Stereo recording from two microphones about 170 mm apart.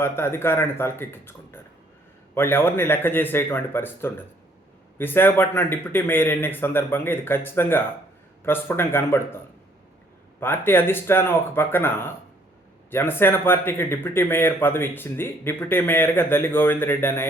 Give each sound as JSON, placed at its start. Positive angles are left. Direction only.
{"t": 0.0, "sound": "speech", "side_deg": 15}
{"t": 10.4, "sound": "speech", "side_deg": 15}